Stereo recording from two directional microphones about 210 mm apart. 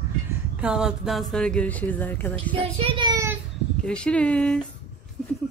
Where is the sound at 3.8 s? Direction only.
5° left (ahead or behind).